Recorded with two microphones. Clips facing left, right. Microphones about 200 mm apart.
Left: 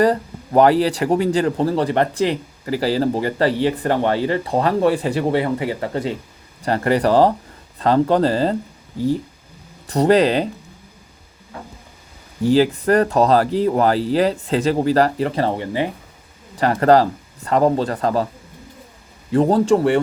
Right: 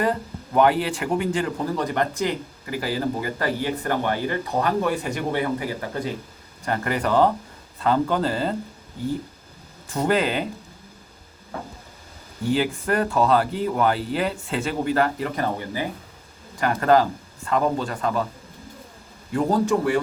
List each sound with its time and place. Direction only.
0.0 s speech: 35° left (ahead or behind)
9.8 s speech: 40° left (ahead or behind)
12.4 s speech: 35° left (ahead or behind)
19.3 s speech: 30° left (ahead or behind)